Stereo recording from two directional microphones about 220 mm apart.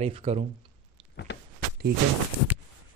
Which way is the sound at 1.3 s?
50° left (ahead or behind).